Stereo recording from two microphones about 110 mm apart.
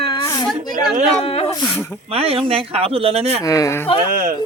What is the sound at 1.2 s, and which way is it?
Speech, 60° left (ahead or behind).